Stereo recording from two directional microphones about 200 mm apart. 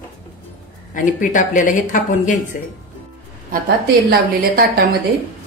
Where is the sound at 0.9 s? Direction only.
40° left (ahead or behind).